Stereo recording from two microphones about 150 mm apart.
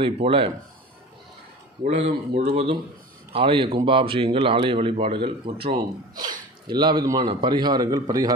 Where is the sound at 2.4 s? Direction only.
45° right (ahead or behind); by 8.3 s 25° right (ahead or behind).